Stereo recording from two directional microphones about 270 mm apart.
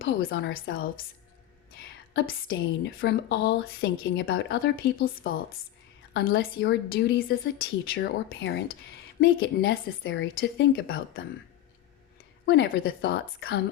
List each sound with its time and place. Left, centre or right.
0.0 s a woman's voice: left
2.1 s a woman's voice: left
12.5 s a woman's voice: left